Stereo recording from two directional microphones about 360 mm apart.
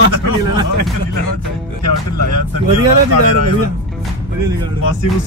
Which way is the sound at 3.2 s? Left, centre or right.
Right.